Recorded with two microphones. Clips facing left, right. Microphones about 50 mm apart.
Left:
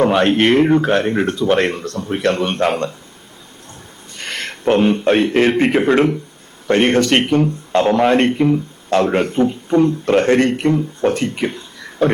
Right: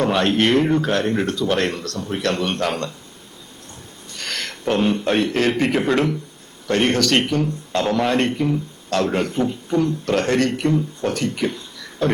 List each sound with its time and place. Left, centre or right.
0.0 s speech: left
4.2 s a sound: left
4.6 s speech: left